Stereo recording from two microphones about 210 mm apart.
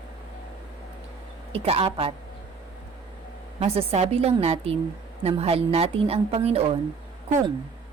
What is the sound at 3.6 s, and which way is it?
A woman's voice, 30° right (ahead or behind).